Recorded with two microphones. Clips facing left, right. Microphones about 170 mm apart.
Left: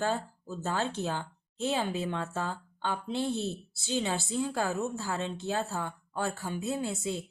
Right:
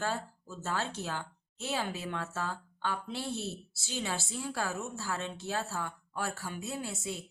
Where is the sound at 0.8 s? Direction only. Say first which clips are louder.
Left 5 dB; 20° left (ahead or behind).